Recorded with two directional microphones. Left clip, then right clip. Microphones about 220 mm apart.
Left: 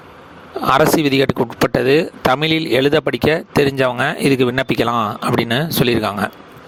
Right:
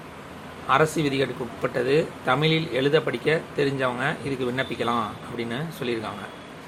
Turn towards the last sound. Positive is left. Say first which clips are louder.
# left 12 dB
turn(degrees=50)  # may be behind; listen again after turning